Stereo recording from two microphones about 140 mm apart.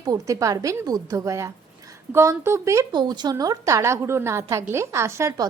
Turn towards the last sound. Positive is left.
turn(degrees=-20)  # may be behind; listen again after turning